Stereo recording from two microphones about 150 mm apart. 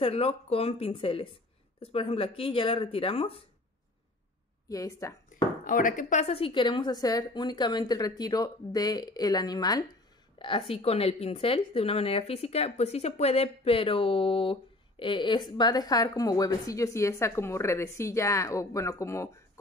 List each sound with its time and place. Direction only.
0.0 s speech: 40° left (ahead or behind)
4.6 s speech: 20° left (ahead or behind)
5.3 s speech: 65° left (ahead or behind); by 9.8 s 25° left (ahead or behind)
10.4 s speech: 40° left (ahead or behind); by 19.6 s 20° left (ahead or behind)